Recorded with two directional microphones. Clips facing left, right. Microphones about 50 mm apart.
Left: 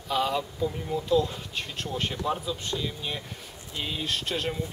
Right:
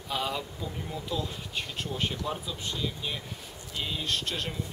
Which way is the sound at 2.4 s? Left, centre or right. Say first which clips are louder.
Left 3 dB; centre.